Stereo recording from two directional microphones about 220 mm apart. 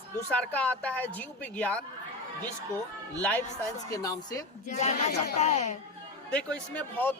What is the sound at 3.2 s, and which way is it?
Speech, 10° left (ahead or behind).